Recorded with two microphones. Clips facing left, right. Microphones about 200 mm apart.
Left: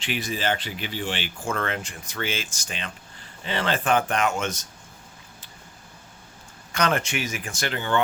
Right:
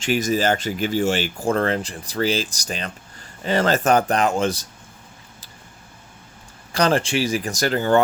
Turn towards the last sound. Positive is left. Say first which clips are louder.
# right 8 dB
turn(degrees=-40)  # may be behind; listen again after turning